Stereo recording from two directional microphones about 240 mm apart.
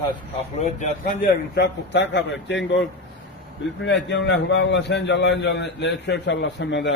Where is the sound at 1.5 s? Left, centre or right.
Left.